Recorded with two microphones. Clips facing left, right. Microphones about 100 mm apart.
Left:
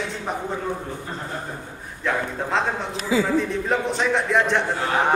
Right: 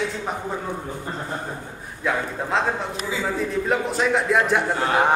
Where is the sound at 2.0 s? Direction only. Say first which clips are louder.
Even; centre (ahead or behind).